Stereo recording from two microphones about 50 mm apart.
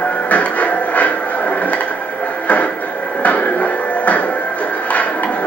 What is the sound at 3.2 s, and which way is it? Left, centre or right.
Music, left.